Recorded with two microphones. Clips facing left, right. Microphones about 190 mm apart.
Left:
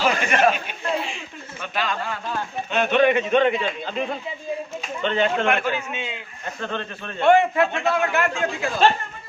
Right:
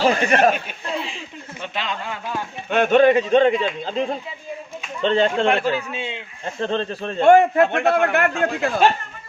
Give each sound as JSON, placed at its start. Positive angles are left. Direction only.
{"t": 0.0, "sound": "a sound", "side_deg": -30}
{"t": 1.6, "sound": "speech", "side_deg": -25}
{"t": 2.6, "sound": "speech", "side_deg": -50}